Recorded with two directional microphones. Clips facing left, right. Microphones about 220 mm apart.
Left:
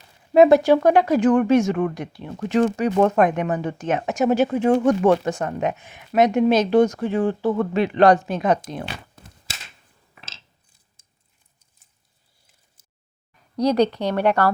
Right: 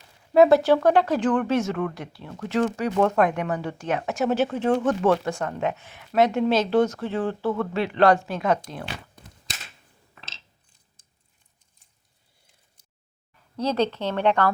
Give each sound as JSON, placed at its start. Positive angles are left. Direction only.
{"t": 0.3, "sound": "speech", "side_deg": 15}
{"t": 13.6, "sound": "speech", "side_deg": 15}